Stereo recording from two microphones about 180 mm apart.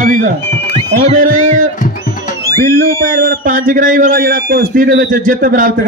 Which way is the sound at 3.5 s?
45° right (ahead or behind).